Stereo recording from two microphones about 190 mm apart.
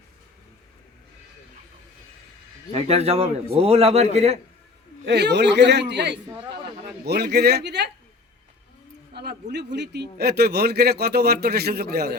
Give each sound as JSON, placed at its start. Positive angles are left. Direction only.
{"t": 2.7, "sound": "speech", "side_deg": -35}
{"t": 5.0, "sound": "a man's voice", "side_deg": -65}
{"t": 9.1, "sound": "a man's voice", "side_deg": -60}